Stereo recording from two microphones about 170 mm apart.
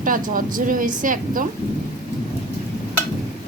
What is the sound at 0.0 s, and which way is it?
Speech, 55° right (ahead or behind).